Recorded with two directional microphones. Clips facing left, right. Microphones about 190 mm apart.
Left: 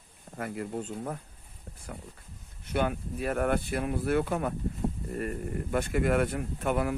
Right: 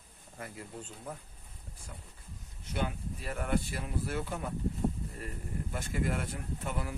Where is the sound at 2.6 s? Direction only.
60° left (ahead or behind).